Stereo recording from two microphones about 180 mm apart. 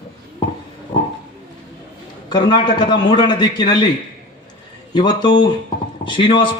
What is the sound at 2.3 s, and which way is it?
Speech, 25° left (ahead or behind).